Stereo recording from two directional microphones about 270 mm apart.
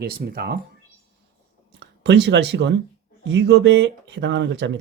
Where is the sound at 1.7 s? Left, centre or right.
Right.